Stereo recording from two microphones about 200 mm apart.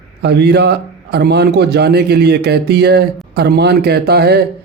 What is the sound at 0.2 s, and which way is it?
A man's voice, 55° right (ahead or behind).